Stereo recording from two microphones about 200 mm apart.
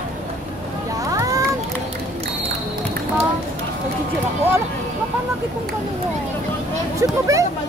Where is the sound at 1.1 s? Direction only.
15° right (ahead or behind).